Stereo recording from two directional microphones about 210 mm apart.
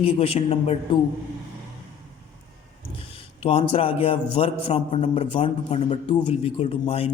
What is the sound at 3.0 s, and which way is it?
A man's voice, 25° left (ahead or behind).